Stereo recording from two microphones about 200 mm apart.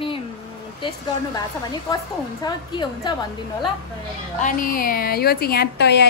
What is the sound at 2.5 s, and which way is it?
Speech, 20° left (ahead or behind).